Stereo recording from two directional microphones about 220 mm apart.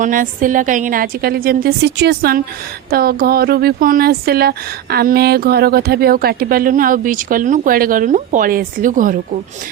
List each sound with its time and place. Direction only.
0.0 s speech: 35° right (ahead or behind)